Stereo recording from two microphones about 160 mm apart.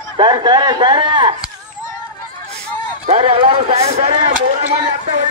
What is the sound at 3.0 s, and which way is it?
Speech, 40° right (ahead or behind).